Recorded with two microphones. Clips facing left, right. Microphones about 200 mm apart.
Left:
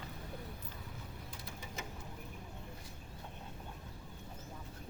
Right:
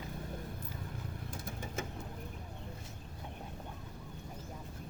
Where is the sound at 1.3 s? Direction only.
50° right (ahead or behind).